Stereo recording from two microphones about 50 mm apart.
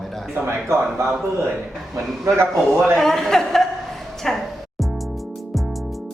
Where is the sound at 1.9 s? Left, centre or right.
Right.